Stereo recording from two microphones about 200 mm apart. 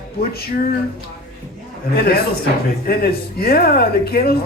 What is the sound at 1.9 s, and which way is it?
Speech, 50° left (ahead or behind).